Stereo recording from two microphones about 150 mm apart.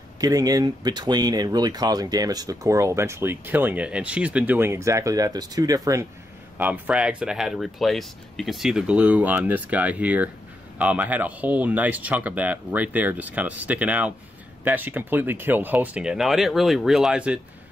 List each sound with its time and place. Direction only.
0.2 s speech: 25° right (ahead or behind)
6.6 s speech: 10° right (ahead or behind)